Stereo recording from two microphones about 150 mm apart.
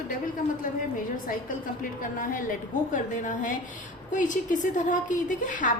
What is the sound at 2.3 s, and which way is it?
A woman's voice, 60° left (ahead or behind).